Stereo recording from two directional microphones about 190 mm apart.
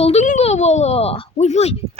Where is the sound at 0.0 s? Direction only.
35° left (ahead or behind).